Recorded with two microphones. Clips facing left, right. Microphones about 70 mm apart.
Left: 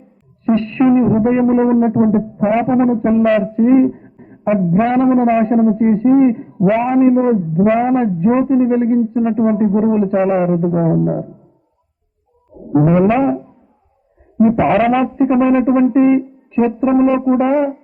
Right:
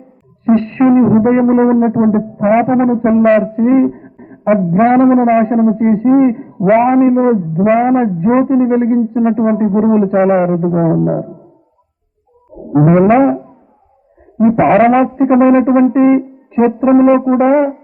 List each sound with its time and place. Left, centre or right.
0.4 s a woman's voice: right
3.5 s a sound: right
4.7 s a man's voice: right
6.7 s music: right
7.0 s a man's voice: right
7.5 s a man's voice: right
12.7 s a man's voice: right
14.5 s a man's voice: right
15.0 s a man's voice: right
15.3 s music: right
17.3 s a man's voice: right